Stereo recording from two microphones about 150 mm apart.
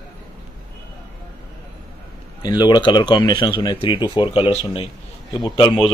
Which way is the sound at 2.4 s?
25° left (ahead or behind).